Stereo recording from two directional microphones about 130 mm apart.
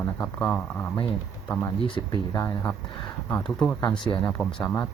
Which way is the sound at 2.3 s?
20° left (ahead or behind).